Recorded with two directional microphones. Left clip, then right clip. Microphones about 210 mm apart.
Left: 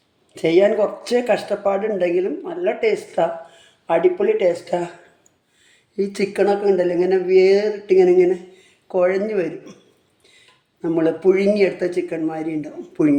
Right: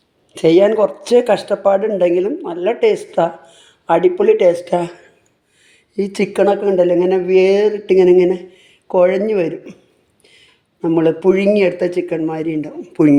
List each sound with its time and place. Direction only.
0.3 s speech: 45° right (ahead or behind)
5.6 s a woman's voice: 40° right (ahead or behind)
10.8 s speech: 45° right (ahead or behind)